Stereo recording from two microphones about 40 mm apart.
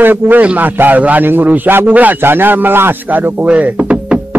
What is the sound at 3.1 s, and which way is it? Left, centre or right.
Speech, right.